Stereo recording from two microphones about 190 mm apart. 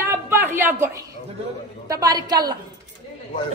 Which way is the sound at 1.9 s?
20° right (ahead or behind).